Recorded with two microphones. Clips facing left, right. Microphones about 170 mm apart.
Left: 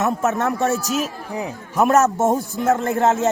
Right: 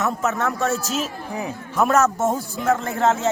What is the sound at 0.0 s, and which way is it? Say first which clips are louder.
A man's voice: left 3 dB; 20° left (ahead or behind).